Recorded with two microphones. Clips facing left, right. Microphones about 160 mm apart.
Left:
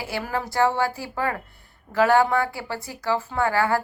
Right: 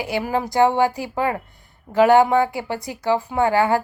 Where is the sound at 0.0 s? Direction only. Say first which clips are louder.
Right 5 dB; 20° right (ahead or behind).